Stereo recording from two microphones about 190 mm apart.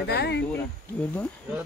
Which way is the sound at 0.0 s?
60° left (ahead or behind).